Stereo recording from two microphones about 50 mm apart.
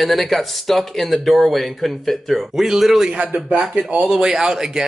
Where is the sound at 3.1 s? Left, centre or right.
Right.